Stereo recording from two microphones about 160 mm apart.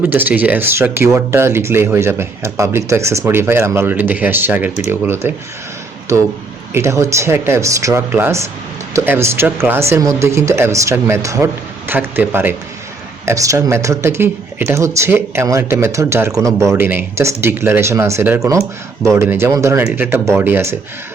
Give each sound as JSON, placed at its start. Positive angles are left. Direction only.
{"t": 0.0, "sound": "speech", "side_deg": -10}
{"t": 6.7, "sound": "speech", "side_deg": -20}